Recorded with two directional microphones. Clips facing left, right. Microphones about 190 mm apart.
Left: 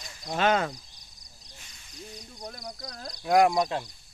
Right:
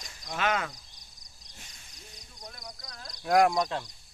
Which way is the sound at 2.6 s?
50° left (ahead or behind).